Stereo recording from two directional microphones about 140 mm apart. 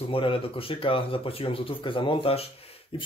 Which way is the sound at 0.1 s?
40° left (ahead or behind).